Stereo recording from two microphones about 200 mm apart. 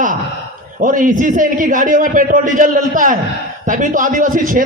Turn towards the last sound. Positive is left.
turn(degrees=-40)  # may be behind; listen again after turning